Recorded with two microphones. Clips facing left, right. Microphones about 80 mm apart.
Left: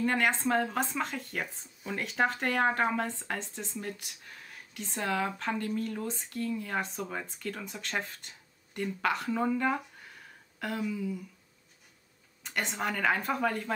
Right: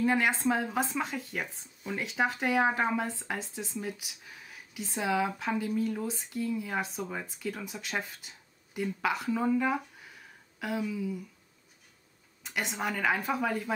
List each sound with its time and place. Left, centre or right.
0.0 s speech: centre
12.4 s speech: centre